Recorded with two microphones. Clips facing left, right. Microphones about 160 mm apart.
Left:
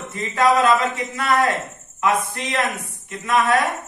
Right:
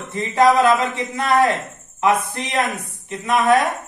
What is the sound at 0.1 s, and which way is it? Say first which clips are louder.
A man's voice: right 3 dB; 20° right (ahead or behind).